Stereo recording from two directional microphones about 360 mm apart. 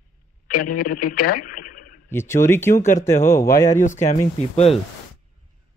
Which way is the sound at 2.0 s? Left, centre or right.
Centre.